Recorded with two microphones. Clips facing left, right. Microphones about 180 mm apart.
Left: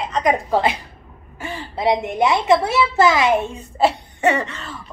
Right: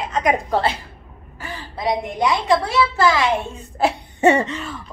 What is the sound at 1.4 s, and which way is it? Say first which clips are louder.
A woman's voice: left 4 dB; 25° left (ahead or behind).